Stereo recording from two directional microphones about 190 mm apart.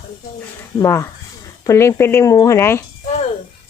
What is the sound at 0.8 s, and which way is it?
Speech, 15° left (ahead or behind).